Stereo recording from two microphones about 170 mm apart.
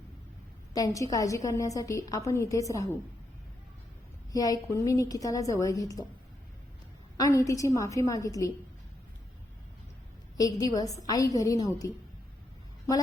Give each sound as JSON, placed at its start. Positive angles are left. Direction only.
{"t": 0.7, "sound": "a woman's voice", "side_deg": 20}
{"t": 4.3, "sound": "a woman's voice", "side_deg": 20}
{"t": 7.2, "sound": "a woman's voice", "side_deg": 20}
{"t": 10.3, "sound": "a woman's voice", "side_deg": 20}